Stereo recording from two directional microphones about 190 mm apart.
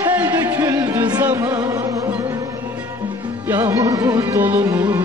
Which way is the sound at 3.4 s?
10° right (ahead or behind).